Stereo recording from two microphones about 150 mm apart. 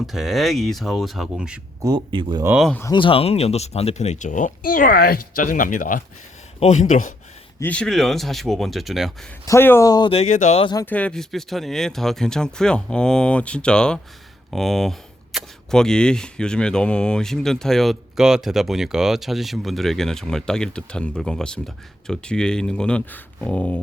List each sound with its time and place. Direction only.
0.0 s speech: centre (ahead or behind)
1.8 s speech: 30° right (ahead or behind)
2.9 s speech: 35° left (ahead or behind); by 6.0 s 65° left (ahead or behind)
6.6 s speech: 50° left (ahead or behind)
7.6 s speech: 5° left (ahead or behind)
9.5 s speech: 15° left (ahead or behind)
10.1 s speech: 50° left (ahead or behind)
10.6 s speech: 30° left (ahead or behind)
10.8 s speech: 10° left (ahead or behind)